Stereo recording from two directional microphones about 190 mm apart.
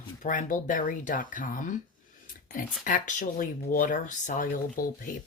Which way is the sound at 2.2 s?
45° left (ahead or behind).